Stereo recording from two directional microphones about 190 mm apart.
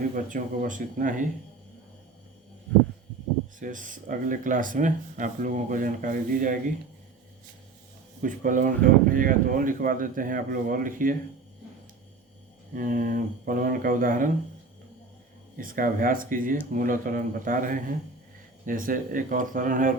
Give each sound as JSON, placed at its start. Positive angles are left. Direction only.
{"t": 0.3, "sound": "speech", "side_deg": -45}
{"t": 3.6, "sound": "speech", "side_deg": -45}
{"t": 8.2, "sound": "speech", "side_deg": -45}
{"t": 12.7, "sound": "speech", "side_deg": -45}
{"t": 15.5, "sound": "speech", "side_deg": -45}